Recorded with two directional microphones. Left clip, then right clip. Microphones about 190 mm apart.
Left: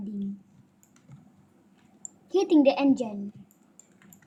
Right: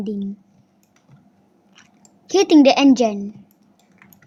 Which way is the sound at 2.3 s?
60° right (ahead or behind).